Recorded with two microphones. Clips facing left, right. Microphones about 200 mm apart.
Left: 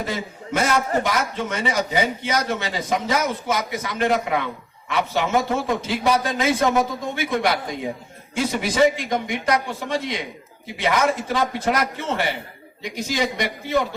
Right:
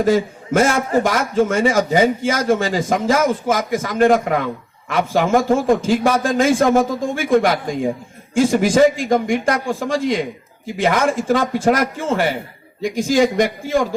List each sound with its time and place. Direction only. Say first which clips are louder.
0.0 s a man's voice: right 12 dB; 45° right (ahead or behind)